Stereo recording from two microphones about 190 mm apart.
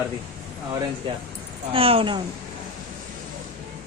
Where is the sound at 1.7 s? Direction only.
30° right (ahead or behind).